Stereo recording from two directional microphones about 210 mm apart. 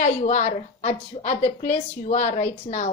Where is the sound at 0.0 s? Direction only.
35° left (ahead or behind).